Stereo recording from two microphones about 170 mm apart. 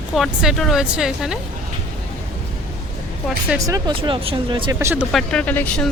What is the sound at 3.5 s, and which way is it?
Speech, 20° right (ahead or behind).